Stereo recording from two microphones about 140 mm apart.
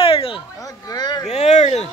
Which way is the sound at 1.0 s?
30° left (ahead or behind).